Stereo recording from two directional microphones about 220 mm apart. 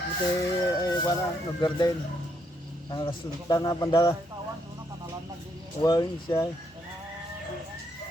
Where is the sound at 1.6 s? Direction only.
20° left (ahead or behind).